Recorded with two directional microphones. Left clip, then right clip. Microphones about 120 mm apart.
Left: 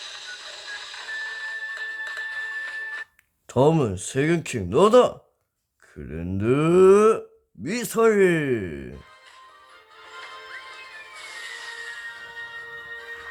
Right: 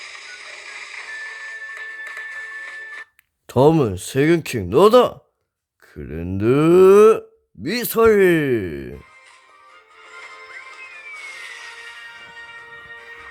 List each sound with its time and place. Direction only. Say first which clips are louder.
1.4 s music: left 1 dB; 85° right
3.4 s speech: right 5 dB; 40° right (ahead or behind)
10.0 s music: right 1 dB; 30° right (ahead or behind)